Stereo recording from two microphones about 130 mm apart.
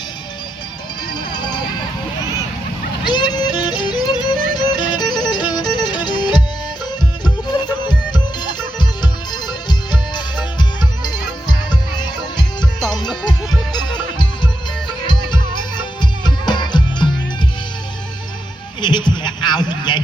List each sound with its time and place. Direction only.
1.1 s music: 35° left (ahead or behind)
3.0 s music: 35° left (ahead or behind)
7.4 s music: 35° left (ahead or behind)
18.8 s a sound: 35° left (ahead or behind)